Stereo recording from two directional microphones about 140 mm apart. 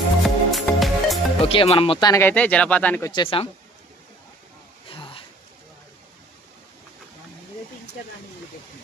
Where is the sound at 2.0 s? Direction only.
20° left (ahead or behind).